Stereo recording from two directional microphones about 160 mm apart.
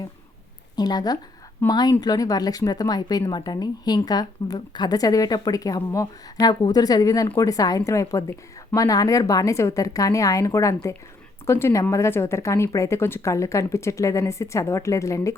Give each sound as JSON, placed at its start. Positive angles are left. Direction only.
{"t": 0.8, "sound": "speech", "side_deg": 25}